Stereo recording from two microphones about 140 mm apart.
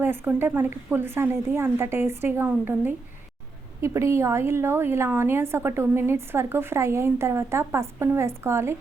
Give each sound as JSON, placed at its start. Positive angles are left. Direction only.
{"t": 0.0, "sound": "a woman's voice", "side_deg": -15}